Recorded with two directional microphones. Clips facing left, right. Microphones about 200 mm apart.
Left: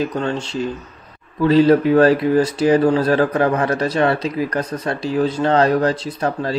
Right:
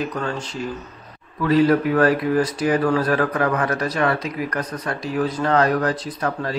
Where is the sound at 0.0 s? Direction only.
25° left (ahead or behind).